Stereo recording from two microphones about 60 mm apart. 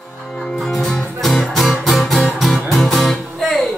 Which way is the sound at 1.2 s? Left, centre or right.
Centre.